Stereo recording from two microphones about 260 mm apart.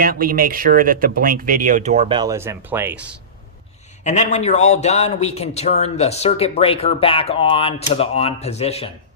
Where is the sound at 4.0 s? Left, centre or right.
Left.